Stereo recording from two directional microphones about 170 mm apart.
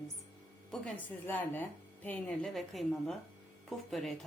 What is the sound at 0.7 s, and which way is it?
A woman's voice, 10° left (ahead or behind).